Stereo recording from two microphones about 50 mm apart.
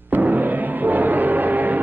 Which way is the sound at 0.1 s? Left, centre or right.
Right.